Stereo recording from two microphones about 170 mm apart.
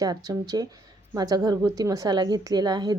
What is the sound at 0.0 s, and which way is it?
A woman's voice, 20° right (ahead or behind).